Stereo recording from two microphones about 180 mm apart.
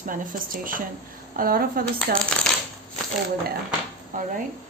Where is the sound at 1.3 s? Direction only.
55° right (ahead or behind).